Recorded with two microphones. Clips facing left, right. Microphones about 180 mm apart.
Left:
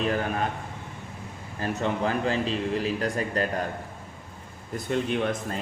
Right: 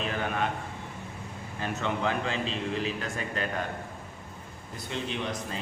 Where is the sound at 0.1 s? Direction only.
40° left (ahead or behind).